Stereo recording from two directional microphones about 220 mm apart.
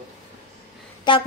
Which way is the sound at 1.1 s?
20° left (ahead or behind).